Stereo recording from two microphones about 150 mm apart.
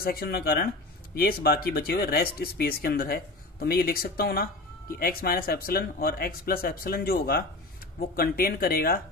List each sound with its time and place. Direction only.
0.0 s speech: 90° left